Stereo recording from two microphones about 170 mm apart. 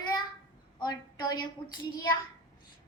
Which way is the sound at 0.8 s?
25° left (ahead or behind).